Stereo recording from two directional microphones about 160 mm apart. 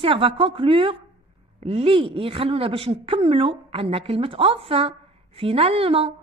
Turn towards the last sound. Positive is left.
turn(degrees=-35)  # may be behind; listen again after turning